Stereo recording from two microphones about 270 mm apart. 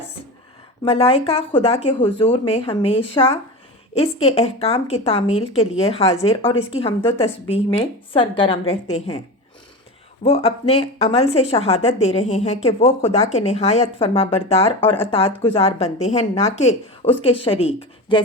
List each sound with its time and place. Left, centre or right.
0.9 s speech: left
10.2 s speech: left